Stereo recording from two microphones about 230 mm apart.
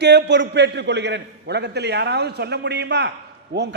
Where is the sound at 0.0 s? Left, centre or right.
Right.